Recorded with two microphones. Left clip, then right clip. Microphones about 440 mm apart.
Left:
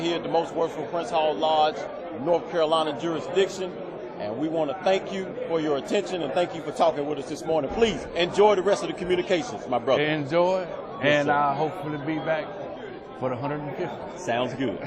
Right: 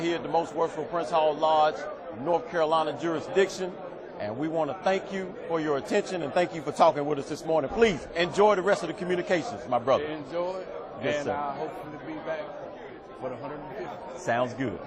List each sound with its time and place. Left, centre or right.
0.0 s a man's voice: centre
10.0 s a man's voice: left
13.2 s a man's voice: left
14.3 s a man's voice: centre